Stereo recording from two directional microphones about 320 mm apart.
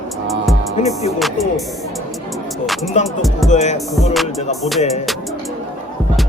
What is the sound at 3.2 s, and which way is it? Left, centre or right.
Speech, centre.